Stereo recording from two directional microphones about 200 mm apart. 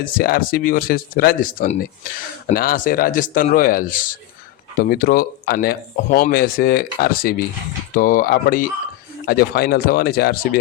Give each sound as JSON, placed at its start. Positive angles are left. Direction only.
{"t": 0.0, "sound": "speech", "side_deg": 45}